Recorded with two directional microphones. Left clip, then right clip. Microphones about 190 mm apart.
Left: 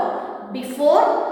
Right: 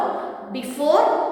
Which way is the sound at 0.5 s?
5° left (ahead or behind).